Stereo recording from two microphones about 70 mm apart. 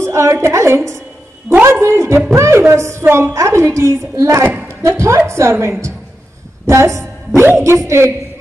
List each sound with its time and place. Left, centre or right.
0.0 s a woman's voice: right